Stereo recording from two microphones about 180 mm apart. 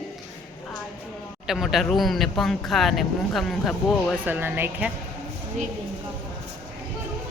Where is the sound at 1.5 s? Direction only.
Centre (ahead or behind).